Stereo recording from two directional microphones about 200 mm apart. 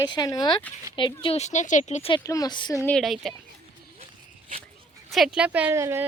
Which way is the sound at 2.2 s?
15° left (ahead or behind).